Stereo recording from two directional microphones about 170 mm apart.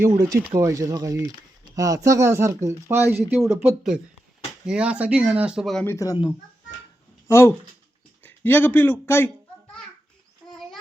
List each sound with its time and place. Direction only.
0.0 s speech: 20° right (ahead or behind); by 5.8 s centre (ahead or behind)
5.8 s speech: 15° left (ahead or behind)
7.3 s speech: 15° left (ahead or behind)
10.4 s a sound: 5° left (ahead or behind)